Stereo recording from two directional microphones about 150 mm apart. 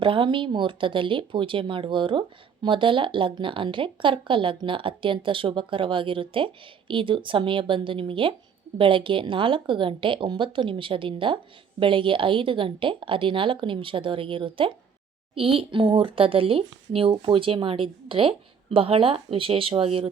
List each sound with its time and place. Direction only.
0.0 s speech: 35° right (ahead or behind)